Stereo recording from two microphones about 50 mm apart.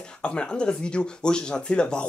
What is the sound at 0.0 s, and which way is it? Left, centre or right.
Speech, centre.